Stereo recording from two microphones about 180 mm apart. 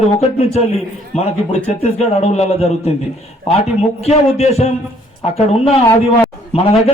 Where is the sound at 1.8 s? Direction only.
35° left (ahead or behind).